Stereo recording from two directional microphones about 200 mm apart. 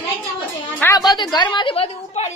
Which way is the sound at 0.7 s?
15° left (ahead or behind).